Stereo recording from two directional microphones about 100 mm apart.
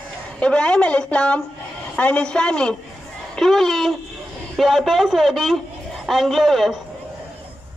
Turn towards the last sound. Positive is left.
turn(degrees=0)  # may be behind; listen again after turning